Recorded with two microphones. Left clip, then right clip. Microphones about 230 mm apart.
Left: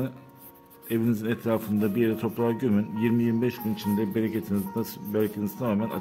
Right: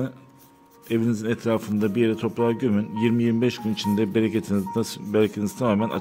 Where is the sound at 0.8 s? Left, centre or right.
Centre.